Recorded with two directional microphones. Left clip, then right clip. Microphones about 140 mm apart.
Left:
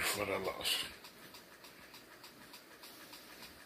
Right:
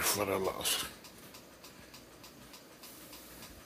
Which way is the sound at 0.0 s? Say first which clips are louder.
Right 4 dB; 25° right (ahead or behind).